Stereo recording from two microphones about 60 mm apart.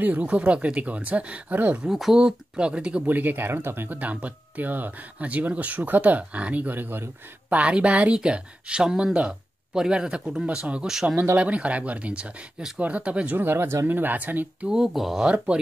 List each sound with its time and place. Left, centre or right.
0.0 s speech: right
1.8 s speech: centre
2.1 s speech: centre
3.1 s speech: right
7.4 s speech: right
13.4 s speech: right
14.7 s speech: centre
15.2 s speech: centre